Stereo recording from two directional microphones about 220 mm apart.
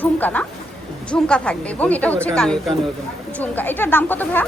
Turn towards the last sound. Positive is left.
turn(degrees=10)  # may be behind; listen again after turning